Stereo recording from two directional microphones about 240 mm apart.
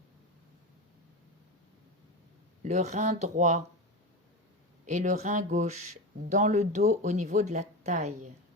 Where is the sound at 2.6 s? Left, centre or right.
Right.